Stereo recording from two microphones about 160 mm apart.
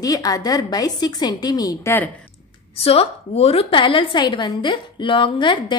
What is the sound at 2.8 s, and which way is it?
A woman's voice, 35° left (ahead or behind).